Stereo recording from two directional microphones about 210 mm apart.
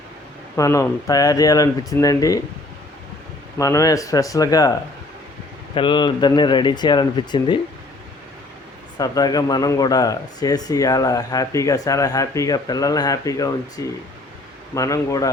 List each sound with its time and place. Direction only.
0.5 s speech: 15° left (ahead or behind)
3.6 s speech: 15° left (ahead or behind)
5.7 s speech: 20° left (ahead or behind)
9.0 s speech: 20° left (ahead or behind)